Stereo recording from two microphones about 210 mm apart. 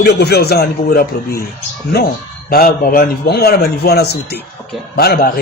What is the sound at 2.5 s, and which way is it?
A man's voice, 45° left (ahead or behind).